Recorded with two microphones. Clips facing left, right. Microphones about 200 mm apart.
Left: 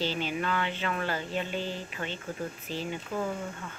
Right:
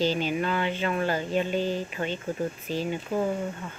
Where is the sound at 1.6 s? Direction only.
45° right (ahead or behind).